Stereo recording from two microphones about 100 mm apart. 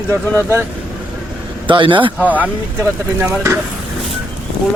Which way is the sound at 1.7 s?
55° right (ahead or behind).